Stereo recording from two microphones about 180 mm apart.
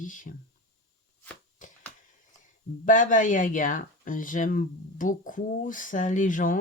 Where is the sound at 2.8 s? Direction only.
45° left (ahead or behind).